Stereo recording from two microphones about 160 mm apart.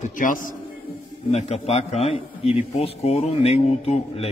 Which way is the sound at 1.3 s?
40° left (ahead or behind).